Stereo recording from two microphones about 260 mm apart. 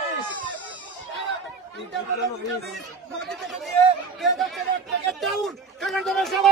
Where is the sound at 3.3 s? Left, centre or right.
Centre.